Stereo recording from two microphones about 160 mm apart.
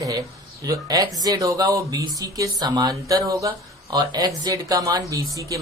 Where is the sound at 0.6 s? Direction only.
20° right (ahead or behind).